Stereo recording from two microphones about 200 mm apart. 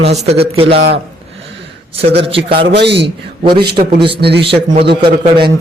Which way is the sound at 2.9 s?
25° right (ahead or behind).